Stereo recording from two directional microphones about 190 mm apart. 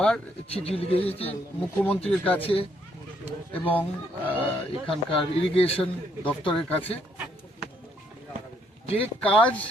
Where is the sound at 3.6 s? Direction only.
10° left (ahead or behind).